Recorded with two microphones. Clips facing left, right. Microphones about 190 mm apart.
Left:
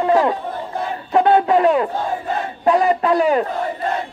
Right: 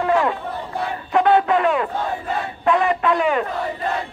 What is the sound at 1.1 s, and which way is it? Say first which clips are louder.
Music: left 2 dB; 30° left (ahead or behind).